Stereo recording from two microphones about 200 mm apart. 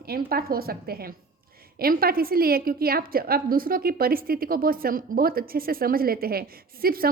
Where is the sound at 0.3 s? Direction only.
50° right (ahead or behind).